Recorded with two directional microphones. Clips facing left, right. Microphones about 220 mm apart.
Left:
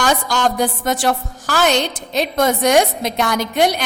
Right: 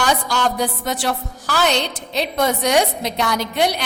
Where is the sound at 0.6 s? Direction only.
50° left (ahead or behind).